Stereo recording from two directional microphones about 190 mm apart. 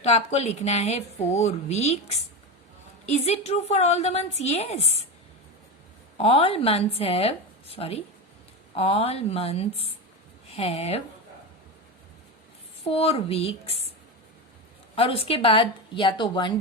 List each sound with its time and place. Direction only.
0.0 s a woman's voice: 35° left (ahead or behind)
6.1 s a woman's voice: 30° left (ahead or behind)
12.8 s a woman's voice: 30° left (ahead or behind)
14.9 s speech: 30° left (ahead or behind)